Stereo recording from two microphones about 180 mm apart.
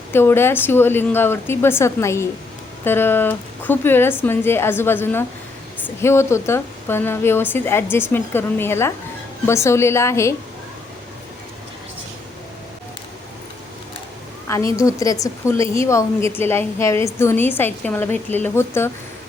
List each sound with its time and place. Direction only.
0.1 s a woman's voice: 15° left (ahead or behind)
14.4 s a woman's voice: 15° left (ahead or behind)